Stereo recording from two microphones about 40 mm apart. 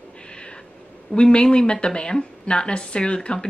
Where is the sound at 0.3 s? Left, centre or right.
Left.